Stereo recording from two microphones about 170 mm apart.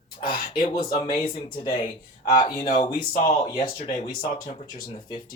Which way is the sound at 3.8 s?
45° left (ahead or behind).